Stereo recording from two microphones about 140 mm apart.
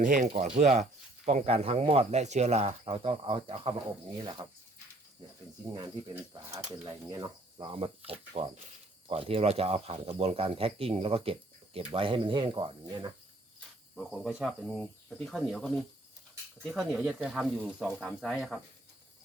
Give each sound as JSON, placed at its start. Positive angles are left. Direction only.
{"t": 0.0, "sound": "speech", "side_deg": -70}
{"t": 0.4, "sound": "speech", "side_deg": -55}
{"t": 5.6, "sound": "speech", "side_deg": -30}
{"t": 7.6, "sound": "speech", "side_deg": -40}
{"t": 13.9, "sound": "speech", "side_deg": 0}